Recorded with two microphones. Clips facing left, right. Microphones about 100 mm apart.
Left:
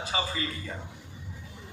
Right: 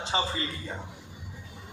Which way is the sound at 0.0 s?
30° right (ahead or behind).